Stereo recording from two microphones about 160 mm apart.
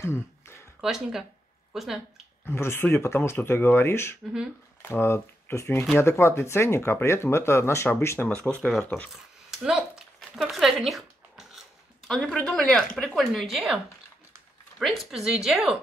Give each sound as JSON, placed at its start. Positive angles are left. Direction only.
{"t": 0.0, "sound": "a sound", "side_deg": 15}
{"t": 0.7, "sound": "speech", "side_deg": 0}
{"t": 2.4, "sound": "speech", "side_deg": 15}
{"t": 9.5, "sound": "a sound", "side_deg": -5}
{"t": 12.1, "sound": "a woman's voice", "side_deg": 5}
{"t": 14.8, "sound": "a woman's voice", "side_deg": 0}